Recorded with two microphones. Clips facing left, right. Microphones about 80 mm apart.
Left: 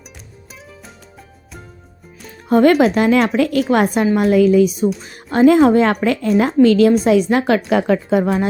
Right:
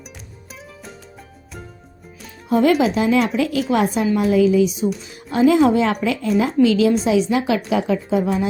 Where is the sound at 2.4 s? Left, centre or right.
Left.